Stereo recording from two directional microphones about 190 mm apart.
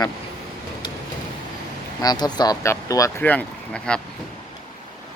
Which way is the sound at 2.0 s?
20° left (ahead or behind).